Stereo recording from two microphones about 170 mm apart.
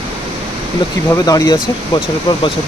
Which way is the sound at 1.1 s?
20° left (ahead or behind).